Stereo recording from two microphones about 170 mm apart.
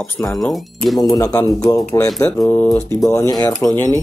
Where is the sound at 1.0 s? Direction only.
20° left (ahead or behind).